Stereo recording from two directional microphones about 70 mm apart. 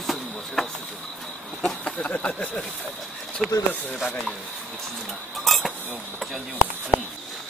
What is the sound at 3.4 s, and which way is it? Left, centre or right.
Speech, centre.